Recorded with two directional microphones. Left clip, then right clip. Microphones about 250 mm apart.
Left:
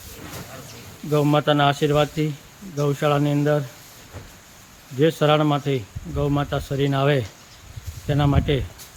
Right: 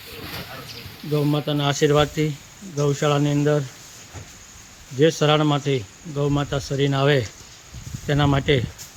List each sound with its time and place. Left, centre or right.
1.3 s speech: centre
1.8 s speech: centre
4.9 s speech: centre